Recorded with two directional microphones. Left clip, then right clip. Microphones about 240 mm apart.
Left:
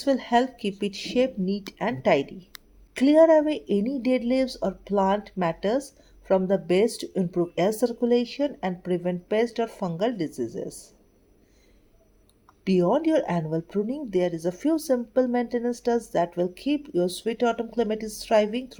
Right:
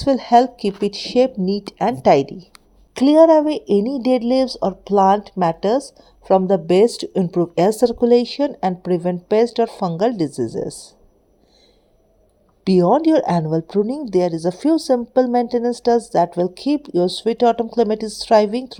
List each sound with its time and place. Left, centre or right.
0.0 s speech: right
12.6 s speech: right